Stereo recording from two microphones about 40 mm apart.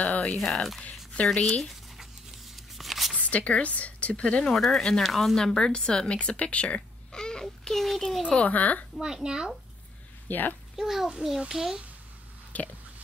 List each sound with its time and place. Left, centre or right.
0.1 s a sound: left
0.4 s a woman's voice: centre
2.0 s a sound: centre
3.2 s speech: left; by 5.0 s centre
5.0 s a woman's voice: centre
5.4 s speech: centre
6.1 s speech: left
7.1 s a sound: centre
8.5 s speech: left
9.0 s a child's voice: centre
10.2 s speech: left
10.8 s a child's voice: centre
12.5 s a sound: left